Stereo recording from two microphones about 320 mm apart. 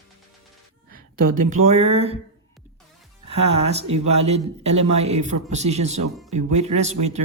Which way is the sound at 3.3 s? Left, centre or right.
Centre.